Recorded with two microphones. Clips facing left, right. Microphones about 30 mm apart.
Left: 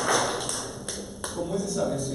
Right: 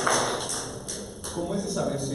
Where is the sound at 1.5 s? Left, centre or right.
Centre.